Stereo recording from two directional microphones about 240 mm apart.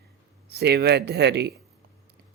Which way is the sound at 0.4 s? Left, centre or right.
Right.